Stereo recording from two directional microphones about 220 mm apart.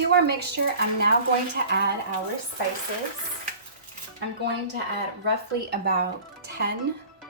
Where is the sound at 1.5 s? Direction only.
50° right (ahead or behind).